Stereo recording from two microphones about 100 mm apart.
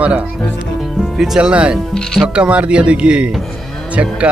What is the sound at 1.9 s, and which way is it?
Speech, 5° left (ahead or behind).